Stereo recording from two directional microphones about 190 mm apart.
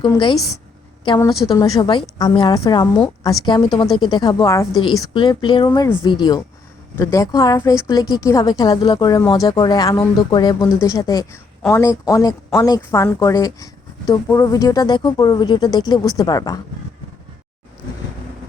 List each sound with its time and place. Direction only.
0.0 s speech: 25° left (ahead or behind)
1.3 s a woman's voice: centre (ahead or behind)
1.5 s speech: 20° left (ahead or behind)